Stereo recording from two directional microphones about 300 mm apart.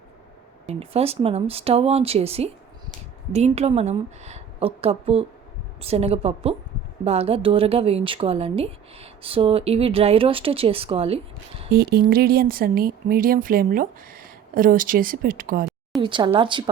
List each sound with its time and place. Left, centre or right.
0.7 s a woman's voice: centre
11.7 s a woman's voice: right
16.0 s speech: centre